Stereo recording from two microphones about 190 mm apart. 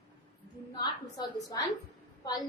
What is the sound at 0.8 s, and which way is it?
Speech, 20° left (ahead or behind).